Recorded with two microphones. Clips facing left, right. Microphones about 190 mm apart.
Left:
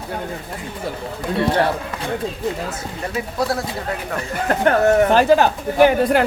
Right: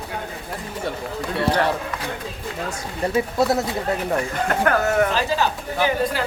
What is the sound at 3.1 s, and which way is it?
Speech, 25° right (ahead or behind).